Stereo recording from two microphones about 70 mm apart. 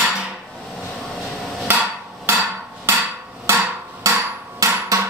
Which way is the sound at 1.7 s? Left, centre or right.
Right.